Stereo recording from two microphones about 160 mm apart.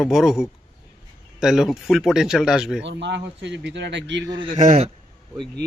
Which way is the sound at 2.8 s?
90° right.